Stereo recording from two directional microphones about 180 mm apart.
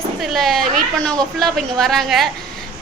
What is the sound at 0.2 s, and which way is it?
A woman's voice, centre (ahead or behind).